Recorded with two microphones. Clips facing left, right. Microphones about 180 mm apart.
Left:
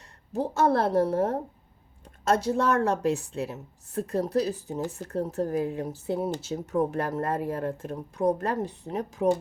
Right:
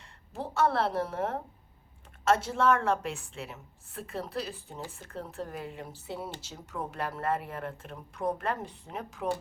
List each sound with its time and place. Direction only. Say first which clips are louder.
0.3 s a woman's voice: left 4 dB; 40° left (ahead or behind)